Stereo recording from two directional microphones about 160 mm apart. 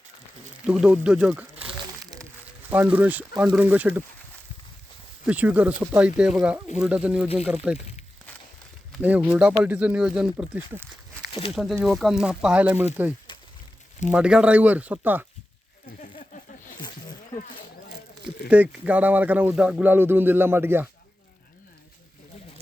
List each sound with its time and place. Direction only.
0.6 s speech: 5° right (ahead or behind)
2.6 s speech: 10° right (ahead or behind)
5.2 s speech: 10° right (ahead or behind)
9.0 s speech: 10° right (ahead or behind)
11.3 s a sound: 35° left (ahead or behind)
11.5 s speech: centre (ahead or behind)
16.0 s a sound: 55° left (ahead or behind)
18.5 s speech: 10° right (ahead or behind)